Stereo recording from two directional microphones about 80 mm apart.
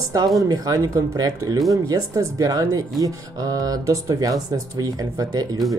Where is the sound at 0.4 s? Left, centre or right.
Right.